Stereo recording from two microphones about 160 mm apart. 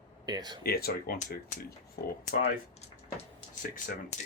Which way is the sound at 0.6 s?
70° left (ahead or behind).